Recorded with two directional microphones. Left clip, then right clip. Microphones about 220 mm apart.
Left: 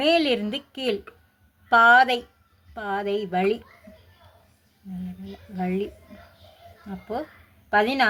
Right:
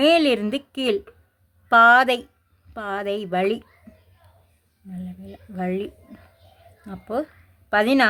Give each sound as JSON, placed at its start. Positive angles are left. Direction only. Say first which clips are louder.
{"t": 0.0, "sound": "speech", "louder": "right 4 dB", "side_deg": -35}
{"t": 5.5, "sound": "speech", "louder": "right 2 dB", "side_deg": -35}
{"t": 7.7, "sound": "speech", "louder": "right 2 dB", "side_deg": -40}